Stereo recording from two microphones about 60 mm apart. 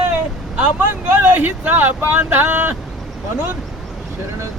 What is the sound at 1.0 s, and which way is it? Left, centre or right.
Speech, right.